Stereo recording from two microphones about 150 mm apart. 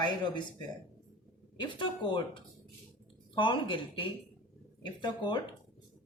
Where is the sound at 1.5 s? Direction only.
30° left (ahead or behind).